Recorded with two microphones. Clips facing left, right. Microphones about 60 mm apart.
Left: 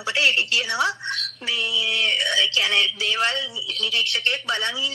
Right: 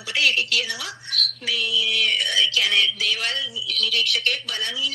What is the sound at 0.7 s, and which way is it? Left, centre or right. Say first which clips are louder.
Speech: left 9 dB; left.